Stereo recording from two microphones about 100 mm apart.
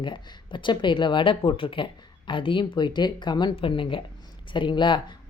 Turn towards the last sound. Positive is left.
turn(degrees=55)  # may be behind; listen again after turning